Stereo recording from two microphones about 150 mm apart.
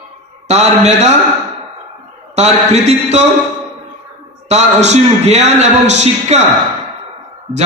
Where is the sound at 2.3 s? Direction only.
50° right (ahead or behind).